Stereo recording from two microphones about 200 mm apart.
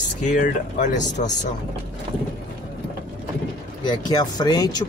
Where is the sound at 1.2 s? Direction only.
40° left (ahead or behind).